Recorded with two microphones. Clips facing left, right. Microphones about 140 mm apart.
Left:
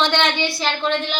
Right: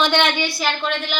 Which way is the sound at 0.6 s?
5° right (ahead or behind).